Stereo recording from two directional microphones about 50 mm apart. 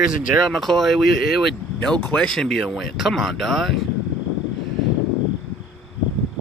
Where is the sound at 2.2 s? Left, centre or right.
Centre.